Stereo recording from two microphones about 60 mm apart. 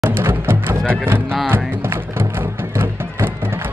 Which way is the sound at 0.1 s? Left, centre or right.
Right.